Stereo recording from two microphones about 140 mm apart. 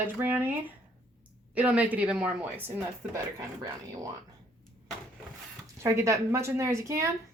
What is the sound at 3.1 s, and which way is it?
Speech, 25° right (ahead or behind).